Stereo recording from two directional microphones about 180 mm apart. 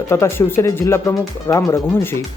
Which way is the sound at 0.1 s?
15° left (ahead or behind).